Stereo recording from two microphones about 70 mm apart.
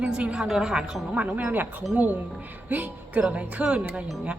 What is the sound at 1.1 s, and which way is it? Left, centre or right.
A woman's voice, right.